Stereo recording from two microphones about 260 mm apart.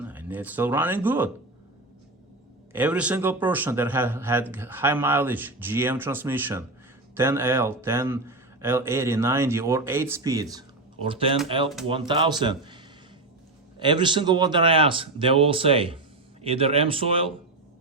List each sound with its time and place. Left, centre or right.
0.0 s speech: centre
2.7 s speech: centre